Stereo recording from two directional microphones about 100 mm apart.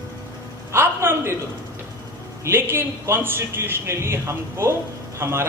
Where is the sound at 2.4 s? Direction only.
20° right (ahead or behind).